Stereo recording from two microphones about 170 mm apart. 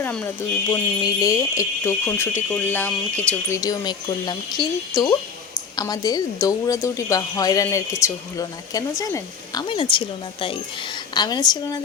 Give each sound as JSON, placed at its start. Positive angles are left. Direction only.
{"t": 0.0, "sound": "speech", "side_deg": 5}
{"t": 0.7, "sound": "speech", "side_deg": 20}
{"t": 3.6, "sound": "speech", "side_deg": 25}
{"t": 11.1, "sound": "speech", "side_deg": 25}